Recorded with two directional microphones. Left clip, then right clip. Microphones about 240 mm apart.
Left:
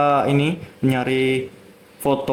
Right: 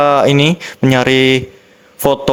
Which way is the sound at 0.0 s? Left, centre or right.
Right.